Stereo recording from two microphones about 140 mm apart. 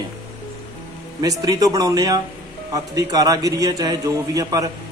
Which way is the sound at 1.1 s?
25° right (ahead or behind).